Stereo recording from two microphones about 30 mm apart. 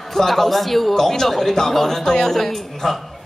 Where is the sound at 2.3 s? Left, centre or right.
Centre.